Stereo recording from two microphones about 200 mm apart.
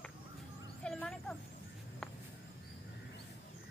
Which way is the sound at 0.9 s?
Centre (ahead or behind).